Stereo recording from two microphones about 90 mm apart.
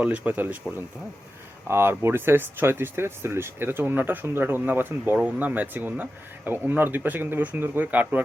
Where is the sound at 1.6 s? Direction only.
25° right (ahead or behind).